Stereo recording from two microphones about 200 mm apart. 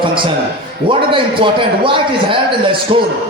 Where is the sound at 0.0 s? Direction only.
25° right (ahead or behind).